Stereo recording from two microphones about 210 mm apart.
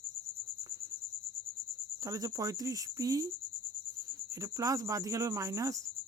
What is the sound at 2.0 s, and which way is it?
Cricket, 15° right (ahead or behind).